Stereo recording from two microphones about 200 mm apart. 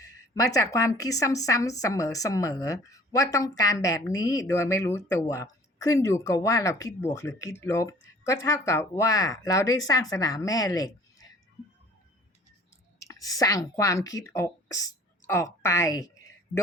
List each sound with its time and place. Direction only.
0.0 s a woman's voice: 15° left (ahead or behind)
13.0 s speech: 15° left (ahead or behind)